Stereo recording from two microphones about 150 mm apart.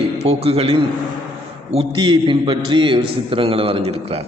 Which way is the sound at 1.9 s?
35° right (ahead or behind).